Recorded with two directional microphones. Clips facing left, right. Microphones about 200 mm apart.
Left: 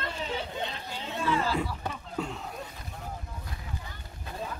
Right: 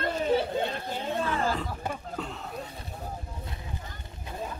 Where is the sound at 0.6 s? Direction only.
50° right (ahead or behind).